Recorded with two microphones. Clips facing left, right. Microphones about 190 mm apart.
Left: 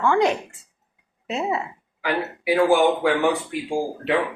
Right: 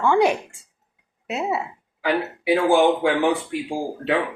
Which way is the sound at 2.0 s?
30° right (ahead or behind).